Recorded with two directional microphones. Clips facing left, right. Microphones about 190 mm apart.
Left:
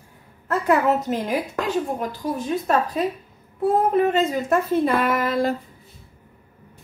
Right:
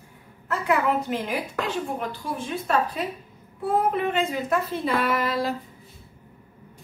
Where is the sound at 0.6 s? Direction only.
45° left (ahead or behind).